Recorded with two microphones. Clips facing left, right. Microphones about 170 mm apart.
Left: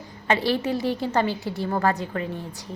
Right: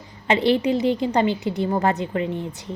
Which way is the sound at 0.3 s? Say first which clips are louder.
Right 4 dB; 20° right (ahead or behind).